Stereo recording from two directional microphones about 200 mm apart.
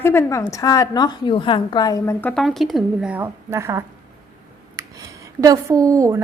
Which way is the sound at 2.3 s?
Centre (ahead or behind).